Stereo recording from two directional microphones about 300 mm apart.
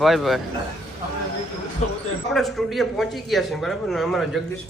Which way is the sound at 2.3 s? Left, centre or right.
Centre.